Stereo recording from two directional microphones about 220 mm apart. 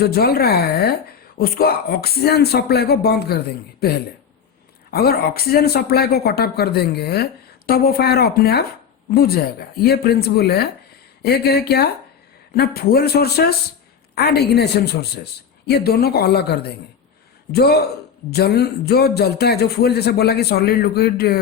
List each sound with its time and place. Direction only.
0.0 s speech: 45° left (ahead or behind)